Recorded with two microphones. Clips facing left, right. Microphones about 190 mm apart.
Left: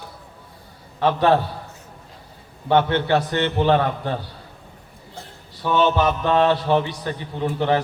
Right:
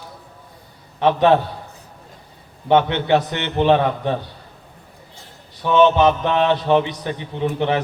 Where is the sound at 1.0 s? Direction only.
20° right (ahead or behind).